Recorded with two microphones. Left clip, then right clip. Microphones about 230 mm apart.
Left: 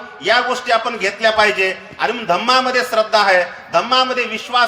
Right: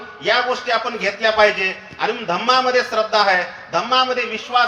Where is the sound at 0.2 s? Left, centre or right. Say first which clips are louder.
Left 2 dB; left.